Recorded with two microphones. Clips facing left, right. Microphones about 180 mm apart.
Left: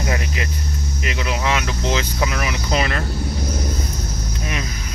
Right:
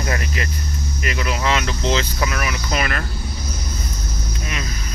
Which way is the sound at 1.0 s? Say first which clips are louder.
Right 1 dB; 15° left (ahead or behind).